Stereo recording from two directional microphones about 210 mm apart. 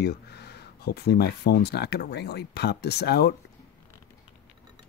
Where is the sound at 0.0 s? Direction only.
50° left (ahead or behind).